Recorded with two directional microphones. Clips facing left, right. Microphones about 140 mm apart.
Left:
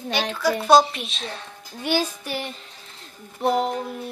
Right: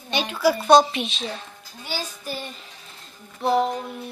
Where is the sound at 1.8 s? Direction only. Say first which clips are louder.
Left 9 dB; 70° left (ahead or behind).